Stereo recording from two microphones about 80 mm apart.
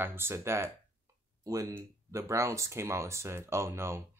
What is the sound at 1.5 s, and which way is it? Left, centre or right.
Speech, right.